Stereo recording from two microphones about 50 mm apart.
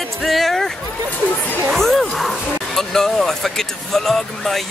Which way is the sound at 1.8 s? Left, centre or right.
Centre.